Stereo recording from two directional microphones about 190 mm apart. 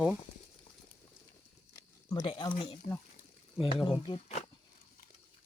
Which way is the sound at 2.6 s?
25° left (ahead or behind).